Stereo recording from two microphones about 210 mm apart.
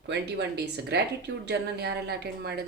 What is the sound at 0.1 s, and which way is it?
A woman's voice, 55° right (ahead or behind).